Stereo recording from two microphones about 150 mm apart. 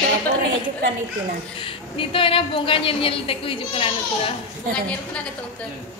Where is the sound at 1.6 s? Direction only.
35° left (ahead or behind).